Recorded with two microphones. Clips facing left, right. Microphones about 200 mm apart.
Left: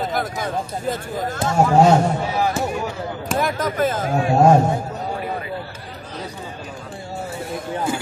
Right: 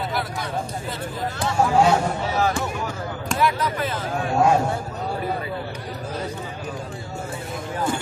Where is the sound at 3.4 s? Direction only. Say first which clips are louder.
Left 2 dB; 45° left (ahead or behind).